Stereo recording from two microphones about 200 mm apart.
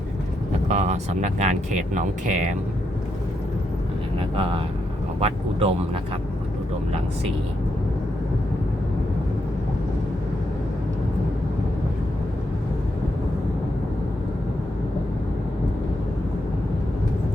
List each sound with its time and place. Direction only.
0.7 s speech: 35° right (ahead or behind)
4.4 s speech: 25° right (ahead or behind)